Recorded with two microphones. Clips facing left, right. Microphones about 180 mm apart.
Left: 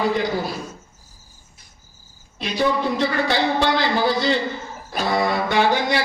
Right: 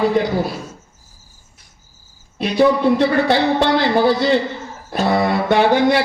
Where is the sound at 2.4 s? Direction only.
60° right (ahead or behind).